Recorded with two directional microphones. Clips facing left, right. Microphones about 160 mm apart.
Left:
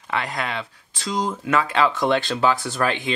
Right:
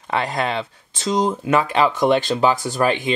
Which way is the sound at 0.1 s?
30° right (ahead or behind).